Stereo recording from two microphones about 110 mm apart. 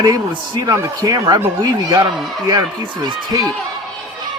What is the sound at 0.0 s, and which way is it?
Speech, 35° right (ahead or behind).